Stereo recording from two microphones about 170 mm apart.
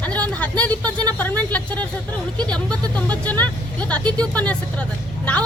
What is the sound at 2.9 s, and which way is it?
A woman's voice, 10° left (ahead or behind).